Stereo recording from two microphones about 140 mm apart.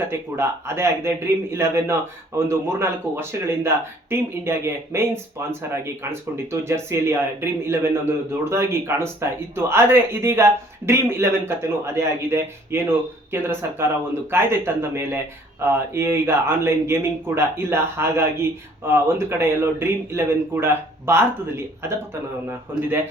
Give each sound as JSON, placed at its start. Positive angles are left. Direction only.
{"t": 0.1, "sound": "a man's voice", "side_deg": -20}